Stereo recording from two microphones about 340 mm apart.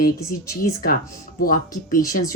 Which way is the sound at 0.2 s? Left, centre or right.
Centre.